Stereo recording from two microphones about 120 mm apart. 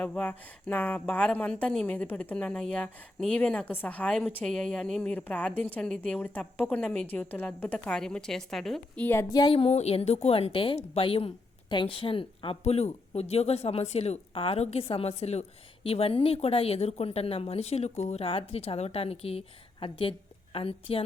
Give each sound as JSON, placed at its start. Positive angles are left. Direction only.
{"t": 0.0, "sound": "a woman's voice", "side_deg": 15}
{"t": 9.3, "sound": "speech", "side_deg": 40}